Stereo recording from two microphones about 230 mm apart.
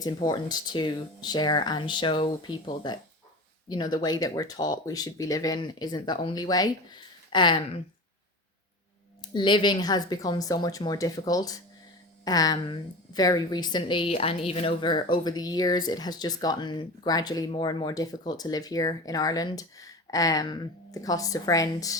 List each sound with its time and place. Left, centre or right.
0.0 s a woman's voice: centre
9.3 s a woman's voice: centre